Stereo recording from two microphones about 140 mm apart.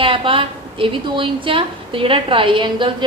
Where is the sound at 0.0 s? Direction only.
40° right (ahead or behind).